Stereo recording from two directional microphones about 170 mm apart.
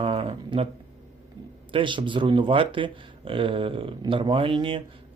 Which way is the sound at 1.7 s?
30° right (ahead or behind).